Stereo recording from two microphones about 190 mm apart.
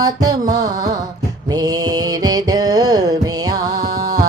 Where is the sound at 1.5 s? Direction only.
20° right (ahead or behind).